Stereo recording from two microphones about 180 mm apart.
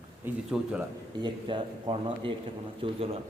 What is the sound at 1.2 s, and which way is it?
A man's voice, 25° right (ahead or behind).